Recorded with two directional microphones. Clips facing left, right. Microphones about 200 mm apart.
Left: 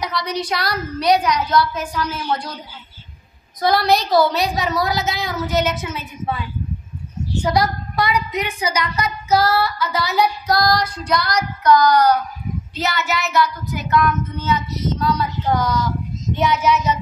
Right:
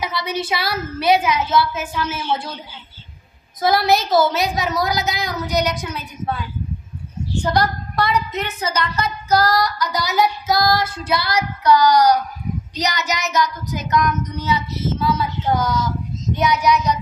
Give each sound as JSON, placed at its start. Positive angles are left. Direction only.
{"t": 0.0, "sound": "a woman's voice", "side_deg": -5}
{"t": 3.6, "sound": "a woman's voice", "side_deg": 0}
{"t": 11.8, "sound": "child singing", "side_deg": -10}
{"t": 14.3, "sound": "a woman's voice", "side_deg": -10}